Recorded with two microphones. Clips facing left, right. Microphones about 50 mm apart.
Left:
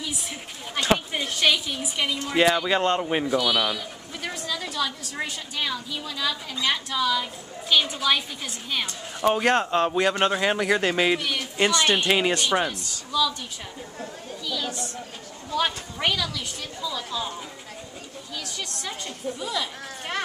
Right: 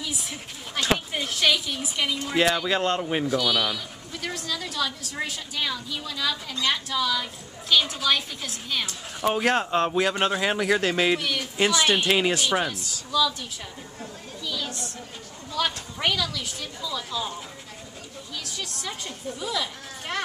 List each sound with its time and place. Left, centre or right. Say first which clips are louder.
0.0 s a woman's voice: even; centre
15.7 s a woman's voice: even; centre
18.3 s a woman's voice: left 1 dB; centre